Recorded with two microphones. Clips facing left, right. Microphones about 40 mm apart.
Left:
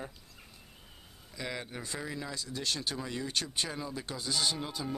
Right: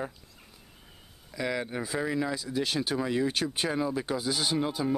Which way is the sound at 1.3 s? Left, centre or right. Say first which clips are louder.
Right 8 dB; centre.